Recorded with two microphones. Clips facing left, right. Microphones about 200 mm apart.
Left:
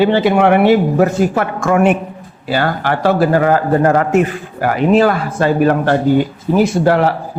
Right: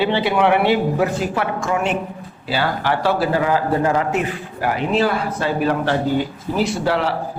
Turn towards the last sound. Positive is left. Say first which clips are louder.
# left 7 dB
turn(degrees=50)  # may be behind; listen again after turning